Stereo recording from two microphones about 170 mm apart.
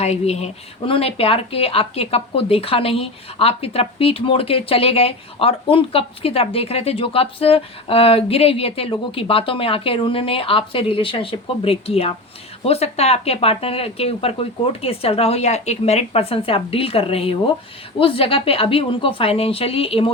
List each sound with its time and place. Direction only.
0.0 s speech: 40° left (ahead or behind)